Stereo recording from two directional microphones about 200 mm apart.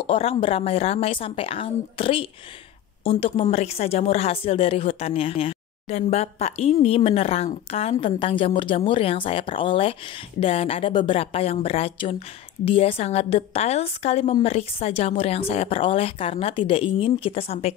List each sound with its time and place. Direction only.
0.0 s a woman's voice: 30° left (ahead or behind)